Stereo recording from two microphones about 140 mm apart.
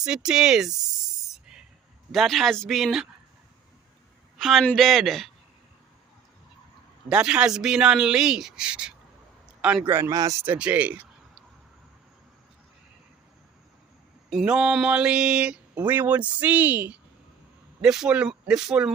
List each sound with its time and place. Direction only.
0.0 s snake: 5° right (ahead or behind)
2.1 s speech: centre (ahead or behind)
4.4 s a sound: centre (ahead or behind)
4.7 s speech: centre (ahead or behind)
7.1 s a man's voice: 5° right (ahead or behind)
9.9 s speech: 20° right (ahead or behind)
10.4 s speech: 10° right (ahead or behind)
14.3 s speech: 5° right (ahead or behind)